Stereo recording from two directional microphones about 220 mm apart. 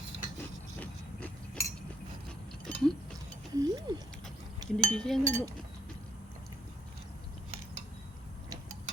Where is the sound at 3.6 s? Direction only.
15° right (ahead or behind).